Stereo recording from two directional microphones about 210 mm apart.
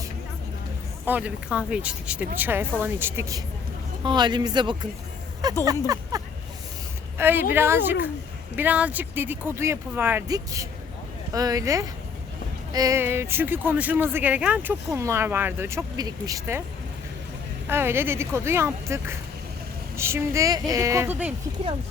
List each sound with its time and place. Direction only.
1.0 s speech: 5° right (ahead or behind)
5.6 s a sound: 15° right (ahead or behind)
7.2 s speech: 10° right (ahead or behind)
17.7 s speech: 10° right (ahead or behind)